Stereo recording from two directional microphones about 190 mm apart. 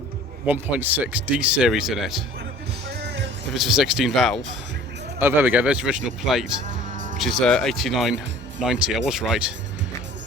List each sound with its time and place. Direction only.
0.4 s speech: 10° right (ahead or behind)
2.9 s music: 60° right (ahead or behind)
3.5 s speech: centre (ahead or behind)
5.2 s speech: 10° right (ahead or behind)
6.7 s music: 40° right (ahead or behind)
7.2 s speech: centre (ahead or behind)